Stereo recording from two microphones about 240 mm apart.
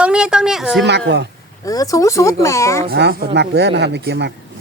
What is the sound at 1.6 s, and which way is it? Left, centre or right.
Speech, centre.